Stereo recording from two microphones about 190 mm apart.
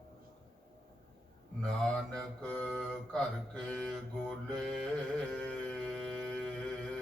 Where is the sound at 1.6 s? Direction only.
5° left (ahead or behind).